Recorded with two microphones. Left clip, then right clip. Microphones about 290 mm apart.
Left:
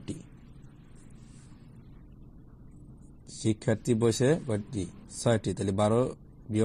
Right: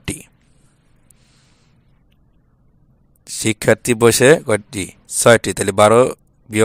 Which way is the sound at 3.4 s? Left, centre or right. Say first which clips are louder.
Right 15 dB; right.